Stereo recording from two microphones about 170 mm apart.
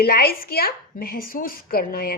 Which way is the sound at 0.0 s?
65° left (ahead or behind).